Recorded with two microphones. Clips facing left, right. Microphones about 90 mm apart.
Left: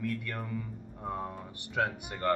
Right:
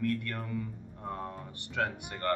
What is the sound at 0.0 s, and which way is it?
Speech, 5° left (ahead or behind).